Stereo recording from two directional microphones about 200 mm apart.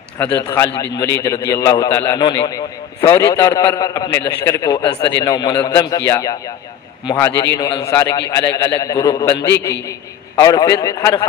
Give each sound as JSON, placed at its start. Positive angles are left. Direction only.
{"t": 0.2, "sound": "a man's voice", "side_deg": 10}